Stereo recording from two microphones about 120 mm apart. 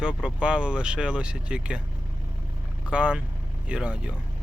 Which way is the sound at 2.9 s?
10° right (ahead or behind).